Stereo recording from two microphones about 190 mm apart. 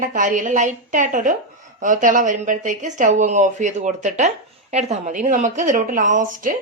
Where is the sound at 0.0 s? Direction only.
45° right (ahead or behind).